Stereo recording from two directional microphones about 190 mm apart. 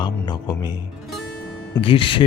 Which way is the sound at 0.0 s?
20° left (ahead or behind).